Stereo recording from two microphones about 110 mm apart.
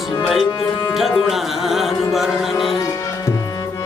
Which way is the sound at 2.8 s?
30° left (ahead or behind).